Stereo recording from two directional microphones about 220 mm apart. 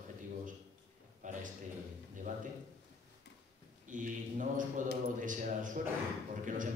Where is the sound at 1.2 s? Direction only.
35° right (ahead or behind).